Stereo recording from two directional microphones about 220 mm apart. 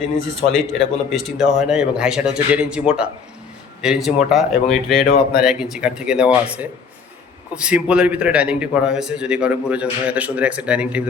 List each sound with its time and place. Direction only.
0.5 s a man's voice: centre (ahead or behind)
5.0 s speech: 45° left (ahead or behind)
5.4 s a man's voice: centre (ahead or behind)